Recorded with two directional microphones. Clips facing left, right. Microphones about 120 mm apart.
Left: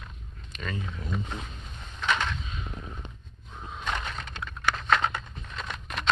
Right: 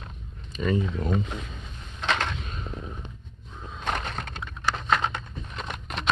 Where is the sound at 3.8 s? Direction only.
40° right (ahead or behind).